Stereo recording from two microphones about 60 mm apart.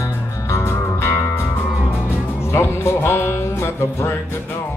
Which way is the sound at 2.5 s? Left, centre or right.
Left.